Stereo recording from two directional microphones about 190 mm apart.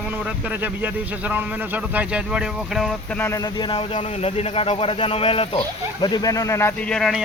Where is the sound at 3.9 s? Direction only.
30° left (ahead or behind); by 7.2 s 5° left (ahead or behind).